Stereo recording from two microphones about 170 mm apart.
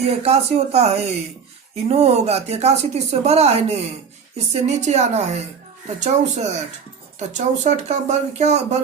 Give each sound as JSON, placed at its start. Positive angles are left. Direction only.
{"t": 0.0, "sound": "a woman's voice", "side_deg": -40}